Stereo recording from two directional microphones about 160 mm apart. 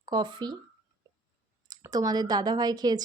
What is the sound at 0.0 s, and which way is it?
Speech, 25° right (ahead or behind).